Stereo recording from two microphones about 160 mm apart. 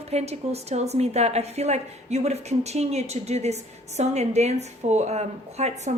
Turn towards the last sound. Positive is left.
turn(degrees=-45)  # may be behind; listen again after turning